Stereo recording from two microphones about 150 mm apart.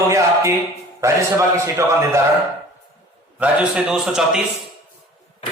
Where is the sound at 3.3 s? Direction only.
5° right (ahead or behind).